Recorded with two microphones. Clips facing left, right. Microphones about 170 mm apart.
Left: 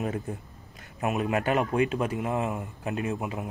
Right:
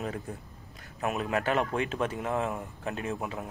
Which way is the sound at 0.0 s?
20° left (ahead or behind).